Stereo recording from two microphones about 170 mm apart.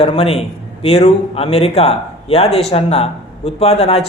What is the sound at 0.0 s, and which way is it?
A man's voice, 35° left (ahead or behind).